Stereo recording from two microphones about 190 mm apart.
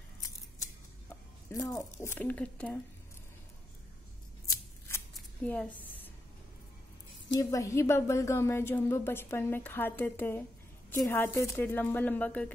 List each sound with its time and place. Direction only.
1.5 s a woman's voice: 15° left (ahead or behind)
4.5 s scissors: 15° left (ahead or behind)
5.1 s a sound: 5° left (ahead or behind)
7.3 s a woman's voice: 15° left (ahead or behind)